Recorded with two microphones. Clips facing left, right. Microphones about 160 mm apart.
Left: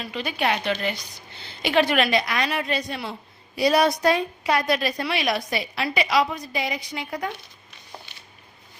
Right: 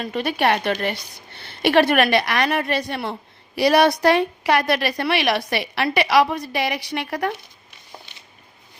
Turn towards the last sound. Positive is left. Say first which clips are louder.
# right 5 dB
turn(degrees=-70)  # may be behind; listen again after turning